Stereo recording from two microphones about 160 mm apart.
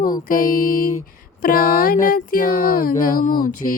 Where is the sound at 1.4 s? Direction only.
65° left (ahead or behind).